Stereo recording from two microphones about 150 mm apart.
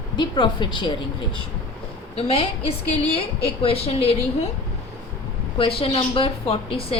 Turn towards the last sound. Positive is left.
turn(degrees=40)  # may be behind; listen again after turning